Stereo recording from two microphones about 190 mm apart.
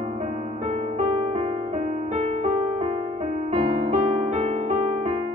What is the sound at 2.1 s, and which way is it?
Music, 35° right (ahead or behind).